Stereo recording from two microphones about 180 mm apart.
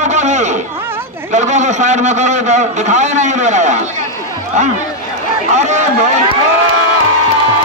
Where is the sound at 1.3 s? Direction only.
40° right (ahead or behind).